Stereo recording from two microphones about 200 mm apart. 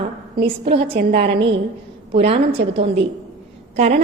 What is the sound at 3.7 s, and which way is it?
Speech, 35° right (ahead or behind).